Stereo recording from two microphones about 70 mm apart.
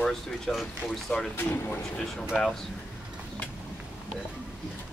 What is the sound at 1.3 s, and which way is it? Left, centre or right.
Speech, left.